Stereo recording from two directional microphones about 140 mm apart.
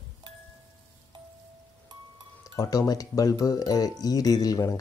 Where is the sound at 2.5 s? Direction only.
25° left (ahead or behind).